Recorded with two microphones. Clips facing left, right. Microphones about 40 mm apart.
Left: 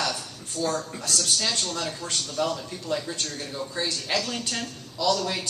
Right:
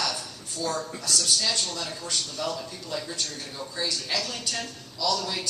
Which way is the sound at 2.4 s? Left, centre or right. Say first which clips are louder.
Left 4 dB; left.